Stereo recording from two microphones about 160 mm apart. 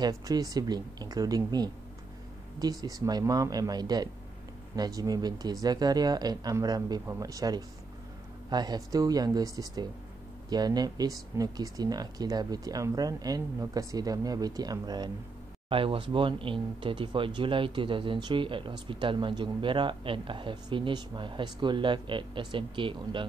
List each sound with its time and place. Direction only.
0.0 s speech: 25° right (ahead or behind)